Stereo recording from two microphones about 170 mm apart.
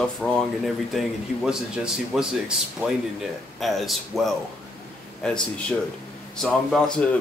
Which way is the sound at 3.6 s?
Centre (ahead or behind).